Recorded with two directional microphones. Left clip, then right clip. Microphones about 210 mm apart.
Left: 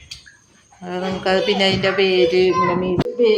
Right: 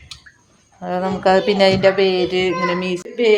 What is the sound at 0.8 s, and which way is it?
Speech, 50° right (ahead or behind).